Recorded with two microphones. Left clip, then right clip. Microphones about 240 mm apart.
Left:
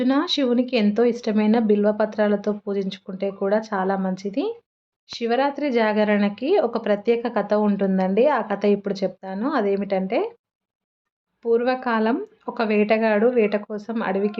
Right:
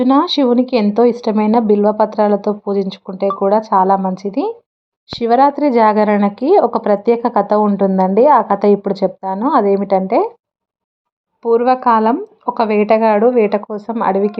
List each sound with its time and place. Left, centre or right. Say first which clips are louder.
0.1 s a woman's voice: right 10 dB; centre
11.4 s a woman's voice: right 9 dB; centre